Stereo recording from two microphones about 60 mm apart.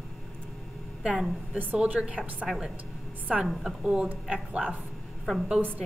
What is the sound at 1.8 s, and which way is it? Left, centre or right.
Speech, centre.